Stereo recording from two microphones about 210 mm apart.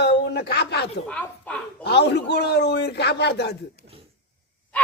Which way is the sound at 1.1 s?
5° left (ahead or behind).